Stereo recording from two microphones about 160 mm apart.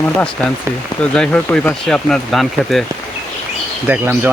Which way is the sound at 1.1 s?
5° left (ahead or behind).